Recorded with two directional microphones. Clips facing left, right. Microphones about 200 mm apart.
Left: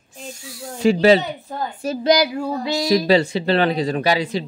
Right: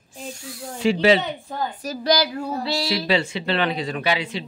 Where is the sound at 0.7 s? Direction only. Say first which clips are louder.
Left 4 dB; 40° left (ahead or behind).